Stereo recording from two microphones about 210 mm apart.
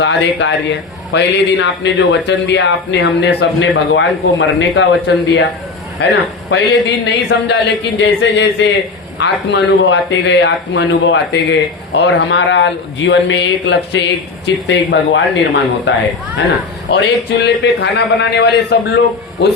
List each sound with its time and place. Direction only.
0.0 s a man's voice: 60° left (ahead or behind)
17.4 s speech: 55° left (ahead or behind)